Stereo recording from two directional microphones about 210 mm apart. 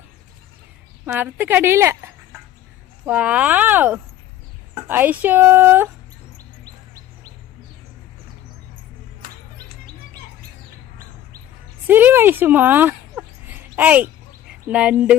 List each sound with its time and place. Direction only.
1.0 s speech: 10° right (ahead or behind)
3.1 s speech: 5° right (ahead or behind)
11.9 s speech: 10° right (ahead or behind)